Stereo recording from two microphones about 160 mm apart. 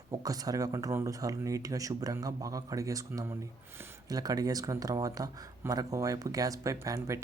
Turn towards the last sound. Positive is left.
turn(degrees=-20)  # may be behind; listen again after turning